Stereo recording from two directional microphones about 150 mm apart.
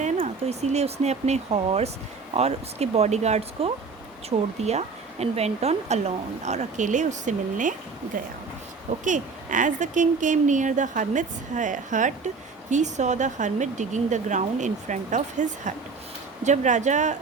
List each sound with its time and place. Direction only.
0.2 s a woman's voice: 45° right (ahead or behind)
9.0 s a woman's voice: 60° right (ahead or behind)